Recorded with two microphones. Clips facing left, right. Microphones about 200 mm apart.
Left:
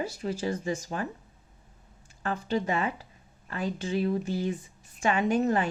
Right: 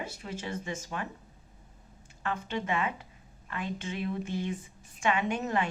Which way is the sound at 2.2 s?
35° left (ahead or behind).